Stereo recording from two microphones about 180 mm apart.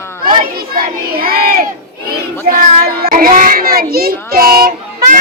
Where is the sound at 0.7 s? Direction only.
55° right (ahead or behind).